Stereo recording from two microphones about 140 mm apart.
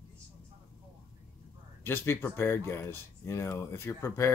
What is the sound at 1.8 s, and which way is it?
Speech, 15° left (ahead or behind).